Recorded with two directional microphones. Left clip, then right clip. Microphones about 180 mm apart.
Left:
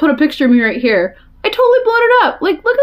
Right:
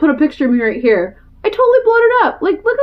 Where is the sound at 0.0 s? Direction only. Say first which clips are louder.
Left 1 dB; 20° left (ahead or behind).